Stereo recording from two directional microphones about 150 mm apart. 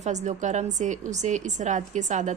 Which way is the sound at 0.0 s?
50° right (ahead or behind).